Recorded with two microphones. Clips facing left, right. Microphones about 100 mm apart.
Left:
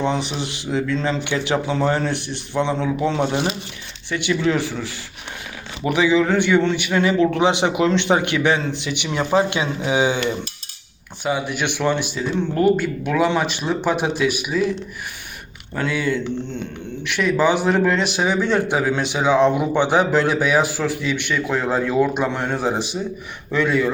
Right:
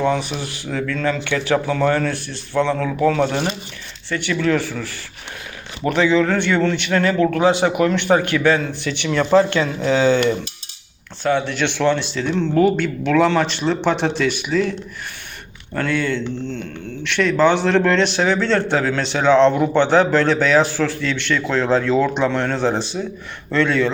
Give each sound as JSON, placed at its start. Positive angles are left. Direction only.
{"t": 0.0, "sound": "a man's voice", "side_deg": 20}
{"t": 15.7, "sound": "a man's voice", "side_deg": 10}